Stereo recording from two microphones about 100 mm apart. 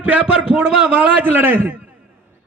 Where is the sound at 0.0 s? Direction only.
15° right (ahead or behind).